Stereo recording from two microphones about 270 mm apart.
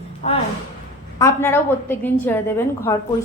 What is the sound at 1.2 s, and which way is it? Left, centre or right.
A woman's voice, centre.